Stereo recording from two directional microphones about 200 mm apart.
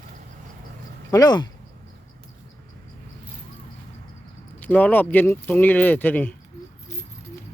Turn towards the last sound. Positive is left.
turn(degrees=10)  # may be behind; listen again after turning